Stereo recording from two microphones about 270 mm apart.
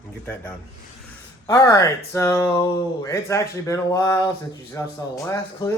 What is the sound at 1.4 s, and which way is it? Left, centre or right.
Speech, centre.